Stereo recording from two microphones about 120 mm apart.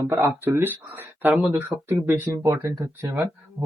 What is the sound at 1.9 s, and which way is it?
Speech, 25° right (ahead or behind).